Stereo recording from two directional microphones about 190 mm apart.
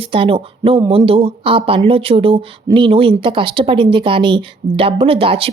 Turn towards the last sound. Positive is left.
turn(degrees=-30)  # may be behind; listen again after turning